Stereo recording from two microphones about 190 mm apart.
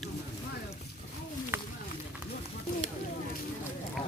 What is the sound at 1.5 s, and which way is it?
Run, 10° right (ahead or behind).